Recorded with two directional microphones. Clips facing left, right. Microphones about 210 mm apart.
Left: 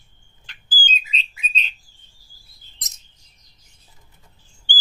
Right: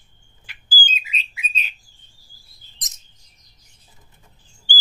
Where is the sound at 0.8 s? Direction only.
10° right (ahead or behind).